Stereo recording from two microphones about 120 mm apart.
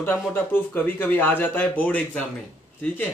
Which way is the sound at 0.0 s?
15° left (ahead or behind).